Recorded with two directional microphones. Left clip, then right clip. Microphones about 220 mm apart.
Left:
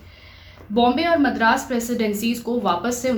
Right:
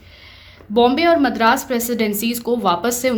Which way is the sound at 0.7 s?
50° right (ahead or behind).